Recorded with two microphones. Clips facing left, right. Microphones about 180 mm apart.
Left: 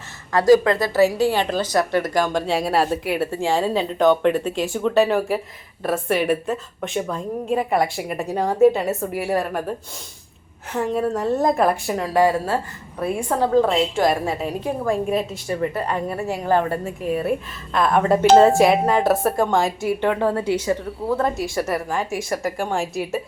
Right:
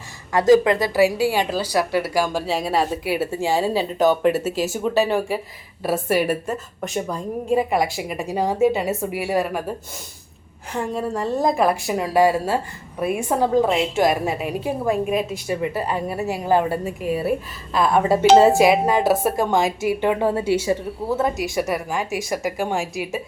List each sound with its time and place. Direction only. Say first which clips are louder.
0.3 s a woman's voice: even; 15° right (ahead or behind)
10.7 s a woman's voice: left 3 dB; centre (ahead or behind)
11.9 s a woman's voice: right 1 dB; 15° right (ahead or behind)
21.4 s speech: right 1 dB; 15° right (ahead or behind)
21.8 s a woman's voice: even; 5° right (ahead or behind)